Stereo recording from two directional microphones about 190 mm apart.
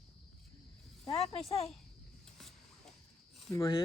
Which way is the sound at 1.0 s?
30° left (ahead or behind).